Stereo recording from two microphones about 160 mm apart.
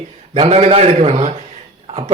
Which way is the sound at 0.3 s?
40° right (ahead or behind).